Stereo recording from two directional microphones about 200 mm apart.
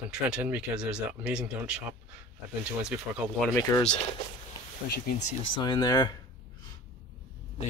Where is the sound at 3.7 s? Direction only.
15° left (ahead or behind).